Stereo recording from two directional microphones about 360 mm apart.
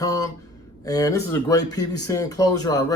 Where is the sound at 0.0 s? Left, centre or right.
Centre.